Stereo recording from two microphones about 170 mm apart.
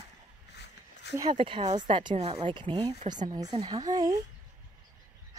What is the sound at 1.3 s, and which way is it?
A woman's voice, 35° right (ahead or behind).